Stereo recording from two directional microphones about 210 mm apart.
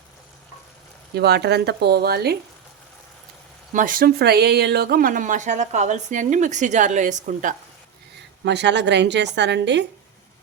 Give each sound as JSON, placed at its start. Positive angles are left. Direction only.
{"t": 1.1, "sound": "speech", "side_deg": -50}
{"t": 3.7, "sound": "speech", "side_deg": -40}
{"t": 8.4, "sound": "a woman's voice", "side_deg": -55}